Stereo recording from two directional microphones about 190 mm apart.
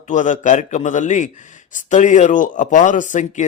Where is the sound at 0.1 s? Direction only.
40° left (ahead or behind).